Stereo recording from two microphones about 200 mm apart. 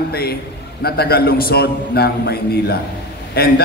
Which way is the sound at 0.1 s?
50° left (ahead or behind).